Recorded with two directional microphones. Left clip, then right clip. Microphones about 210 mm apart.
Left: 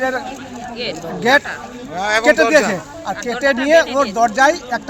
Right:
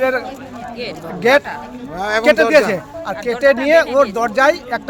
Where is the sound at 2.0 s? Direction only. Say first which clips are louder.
Left 1 dB; 45° right (ahead or behind).